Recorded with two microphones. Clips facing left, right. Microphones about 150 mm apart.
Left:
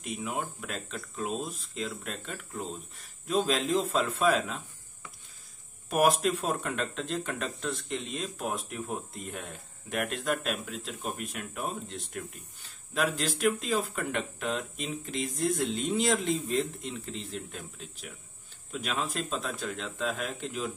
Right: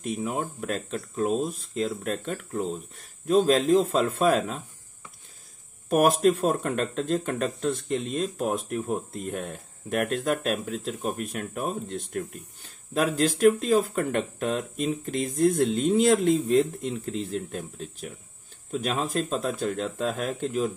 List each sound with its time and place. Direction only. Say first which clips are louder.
0.0 s speech: right 5 dB; 45° right (ahead or behind)
5.9 s speech: right 5 dB; 50° right (ahead or behind)